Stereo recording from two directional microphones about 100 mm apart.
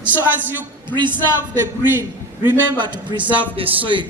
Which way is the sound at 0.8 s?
50° right (ahead or behind).